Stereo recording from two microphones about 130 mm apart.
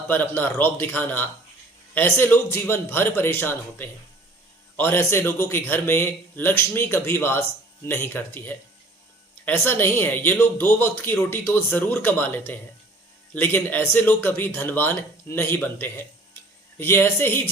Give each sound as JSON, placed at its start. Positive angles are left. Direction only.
{"t": 0.1, "sound": "speech", "side_deg": 15}